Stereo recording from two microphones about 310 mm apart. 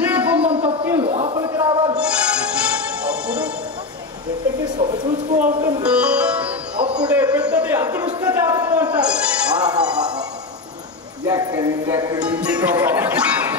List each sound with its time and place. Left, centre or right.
0.0 s a sound: centre
2.6 s music: centre
4.7 s music: centre
6.8 s a man's voice: centre
11.2 s music: centre